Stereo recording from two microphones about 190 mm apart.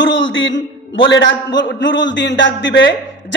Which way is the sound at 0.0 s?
75° left (ahead or behind).